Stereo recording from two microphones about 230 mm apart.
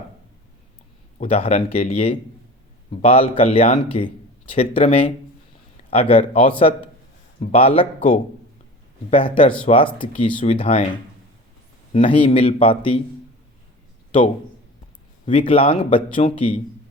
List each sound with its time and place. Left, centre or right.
1.2 s speech: left
11.9 s speech: left
15.3 s speech: left